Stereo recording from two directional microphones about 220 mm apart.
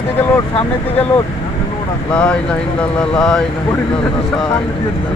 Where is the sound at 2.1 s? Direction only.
5° left (ahead or behind).